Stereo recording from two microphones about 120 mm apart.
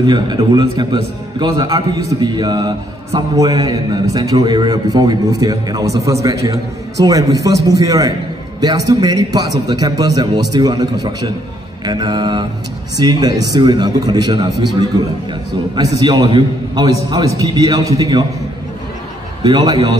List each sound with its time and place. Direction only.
0.0 s a man's voice: 35° right (ahead or behind)
15.7 s a man's voice: 35° right (ahead or behind)
19.4 s a man's voice: 35° right (ahead or behind)